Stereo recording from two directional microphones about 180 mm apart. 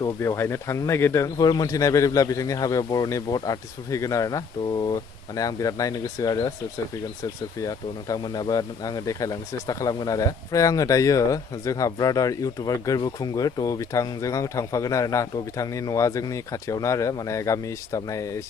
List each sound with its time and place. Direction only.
0.0 s speech: 15° left (ahead or behind)
7.6 s speech: 20° left (ahead or behind)